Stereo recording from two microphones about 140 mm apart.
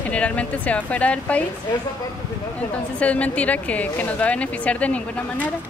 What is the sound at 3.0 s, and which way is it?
Speech, 10° left (ahead or behind).